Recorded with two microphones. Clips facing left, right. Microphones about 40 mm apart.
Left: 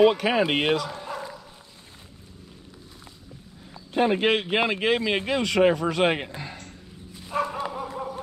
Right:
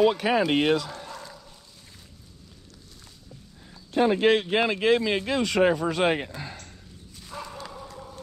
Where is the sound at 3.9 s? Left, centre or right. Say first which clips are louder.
Right 1 dB; left.